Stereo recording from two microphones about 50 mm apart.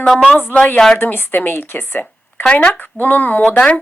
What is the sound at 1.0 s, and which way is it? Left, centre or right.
Speech, left.